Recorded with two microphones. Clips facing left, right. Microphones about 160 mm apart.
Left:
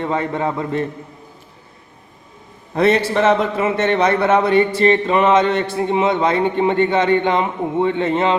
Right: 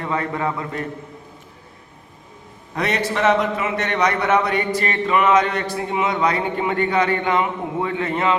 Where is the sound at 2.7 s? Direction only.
30° left (ahead or behind).